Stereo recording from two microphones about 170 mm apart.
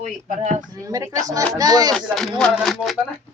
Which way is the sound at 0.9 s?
20° right (ahead or behind).